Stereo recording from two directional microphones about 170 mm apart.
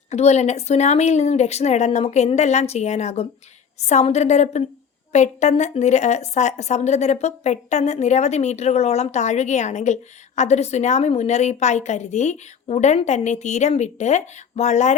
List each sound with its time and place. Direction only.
0.1 s speech: 40° left (ahead or behind)